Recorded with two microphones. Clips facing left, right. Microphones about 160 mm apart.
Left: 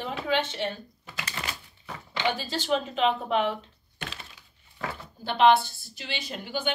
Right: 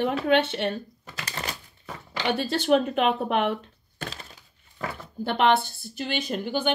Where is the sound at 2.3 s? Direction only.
60° right (ahead or behind).